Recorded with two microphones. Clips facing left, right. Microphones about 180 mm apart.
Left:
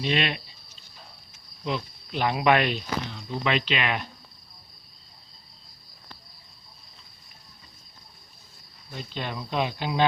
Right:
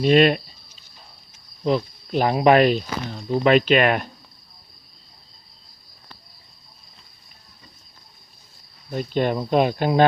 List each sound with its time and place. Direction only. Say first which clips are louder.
0.0 s speech: right 11 dB; 45° right (ahead or behind)
1.6 s speech: right 9 dB; 40° right (ahead or behind)
8.9 s speech: right 12 dB; 50° right (ahead or behind)